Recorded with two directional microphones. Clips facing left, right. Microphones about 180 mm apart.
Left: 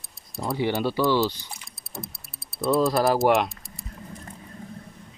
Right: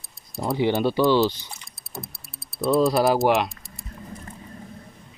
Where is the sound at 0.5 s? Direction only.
20° right (ahead or behind).